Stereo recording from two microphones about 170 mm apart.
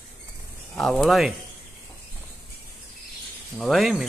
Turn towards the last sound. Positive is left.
turn(degrees=0)  # may be behind; listen again after turning